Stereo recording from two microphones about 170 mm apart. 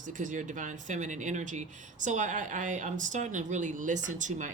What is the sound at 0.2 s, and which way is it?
Speech, 50° right (ahead or behind).